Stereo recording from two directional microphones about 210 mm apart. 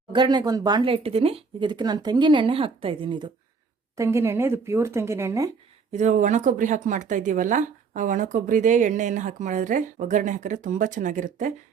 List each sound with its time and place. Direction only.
0.1 s speech: 20° right (ahead or behind)
3.9 s speech: 15° right (ahead or behind)
5.9 s speech: 35° right (ahead or behind)